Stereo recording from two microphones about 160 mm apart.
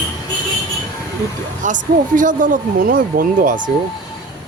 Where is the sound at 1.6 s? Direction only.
55° right (ahead or behind).